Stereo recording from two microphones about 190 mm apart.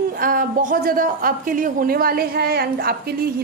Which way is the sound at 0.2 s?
45° right (ahead or behind).